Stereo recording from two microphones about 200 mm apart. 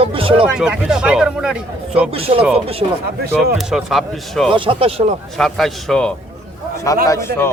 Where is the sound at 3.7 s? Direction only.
Centre (ahead or behind).